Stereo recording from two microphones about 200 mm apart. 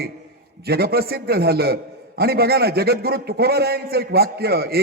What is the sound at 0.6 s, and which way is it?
A man's voice, 50° right (ahead or behind).